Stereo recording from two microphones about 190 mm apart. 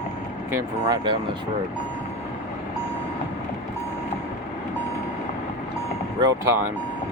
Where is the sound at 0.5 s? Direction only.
20° right (ahead or behind).